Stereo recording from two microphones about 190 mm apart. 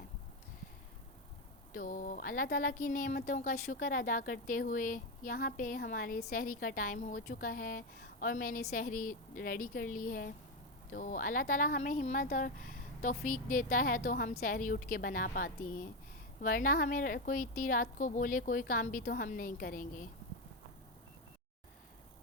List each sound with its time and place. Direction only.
1.7 s speech: 45° left (ahead or behind)